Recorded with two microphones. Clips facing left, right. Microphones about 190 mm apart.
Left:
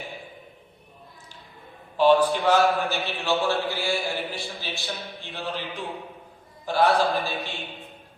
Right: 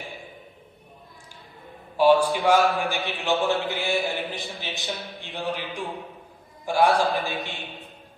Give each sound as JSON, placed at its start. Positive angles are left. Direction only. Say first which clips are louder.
{"t": 2.0, "sound": "a man's voice", "louder": "even", "side_deg": -10}